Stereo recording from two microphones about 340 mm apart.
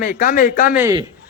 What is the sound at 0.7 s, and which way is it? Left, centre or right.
Speech, centre.